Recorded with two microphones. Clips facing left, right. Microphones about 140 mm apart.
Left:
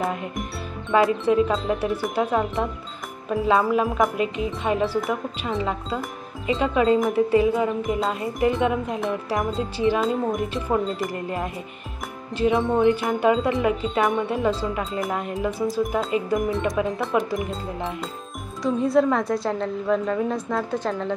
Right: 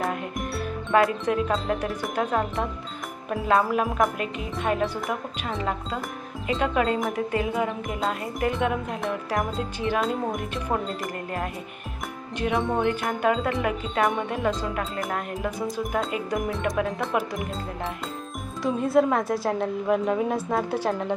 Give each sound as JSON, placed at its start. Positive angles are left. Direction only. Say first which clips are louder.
{"t": 0.0, "sound": "speech", "louder": "left 1 dB", "side_deg": 0}
{"t": 12.4, "sound": "speech", "louder": "left 5 dB", "side_deg": 0}
{"t": 18.6, "sound": "speech", "louder": "left 2 dB", "side_deg": -5}